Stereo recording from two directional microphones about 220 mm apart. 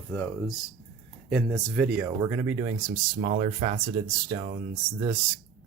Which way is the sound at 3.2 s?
30° right (ahead or behind).